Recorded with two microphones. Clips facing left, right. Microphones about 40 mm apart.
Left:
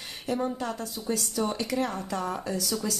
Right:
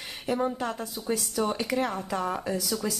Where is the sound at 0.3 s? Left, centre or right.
Centre.